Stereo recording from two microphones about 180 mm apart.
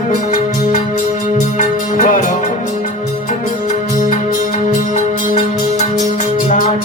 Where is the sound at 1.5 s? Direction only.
45° left (ahead or behind).